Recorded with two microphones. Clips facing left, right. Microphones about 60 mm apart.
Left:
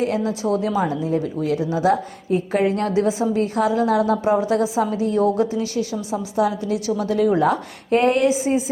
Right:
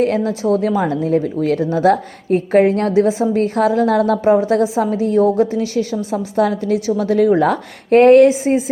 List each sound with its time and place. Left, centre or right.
0.0 s a woman's voice: right
3.3 s a woman's voice: right
7.0 s a woman's voice: right
7.4 s a woman's voice: right